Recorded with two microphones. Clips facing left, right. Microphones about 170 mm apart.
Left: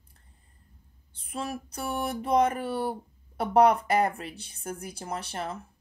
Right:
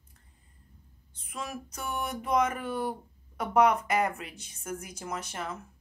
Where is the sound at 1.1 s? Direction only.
30° left (ahead or behind).